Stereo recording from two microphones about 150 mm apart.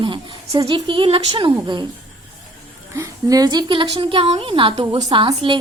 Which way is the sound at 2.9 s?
25° right (ahead or behind).